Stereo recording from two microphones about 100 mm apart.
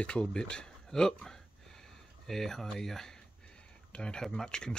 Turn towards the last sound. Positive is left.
turn(degrees=5)  # may be behind; listen again after turning